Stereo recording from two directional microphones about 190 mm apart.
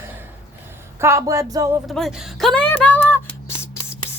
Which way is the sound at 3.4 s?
15° left (ahead or behind).